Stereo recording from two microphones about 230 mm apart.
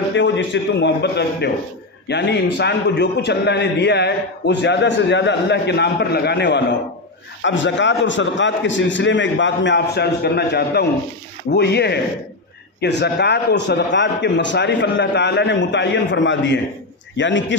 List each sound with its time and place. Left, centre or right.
0.1 s a man's voice: left